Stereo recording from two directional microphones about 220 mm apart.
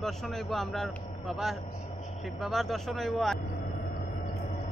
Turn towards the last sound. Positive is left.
turn(degrees=0)  # may be behind; listen again after turning